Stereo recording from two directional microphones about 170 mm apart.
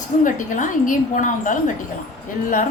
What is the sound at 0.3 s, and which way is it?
A woman's voice, 50° left (ahead or behind).